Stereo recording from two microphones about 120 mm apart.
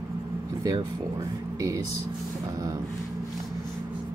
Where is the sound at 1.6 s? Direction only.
30° right (ahead or behind).